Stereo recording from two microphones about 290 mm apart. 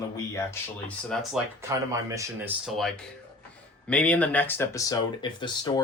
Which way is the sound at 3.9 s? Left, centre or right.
Centre.